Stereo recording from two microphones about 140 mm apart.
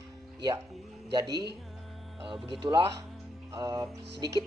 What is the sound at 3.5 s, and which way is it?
Speech, 30° right (ahead or behind).